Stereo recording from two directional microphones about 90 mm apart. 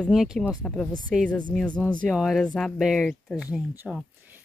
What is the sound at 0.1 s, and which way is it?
Speech, 5° right (ahead or behind).